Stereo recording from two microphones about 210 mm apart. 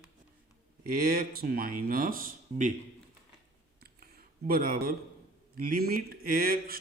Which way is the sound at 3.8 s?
45° right (ahead or behind).